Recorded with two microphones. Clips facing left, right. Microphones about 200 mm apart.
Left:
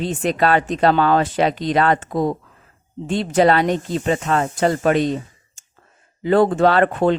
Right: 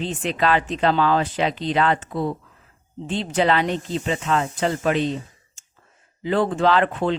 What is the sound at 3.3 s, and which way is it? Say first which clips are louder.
Speech: left 5 dB; 45° left (ahead or behind).